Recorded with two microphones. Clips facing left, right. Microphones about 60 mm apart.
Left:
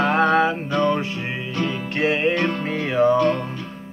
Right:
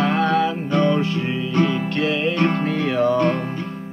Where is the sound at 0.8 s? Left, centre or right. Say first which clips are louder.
Right 3 dB; centre.